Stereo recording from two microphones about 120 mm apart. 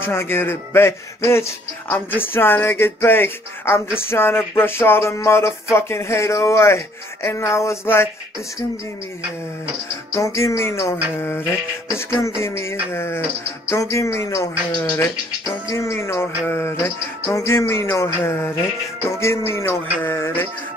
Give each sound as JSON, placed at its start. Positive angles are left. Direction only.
{"t": 0.0, "sound": "speech", "side_deg": 20}
{"t": 10.1, "sound": "speech", "side_deg": 25}
{"t": 19.8, "sound": "mantra", "side_deg": 15}